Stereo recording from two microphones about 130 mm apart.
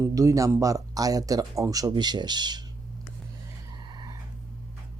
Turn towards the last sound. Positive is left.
turn(degrees=-35)  # may be behind; listen again after turning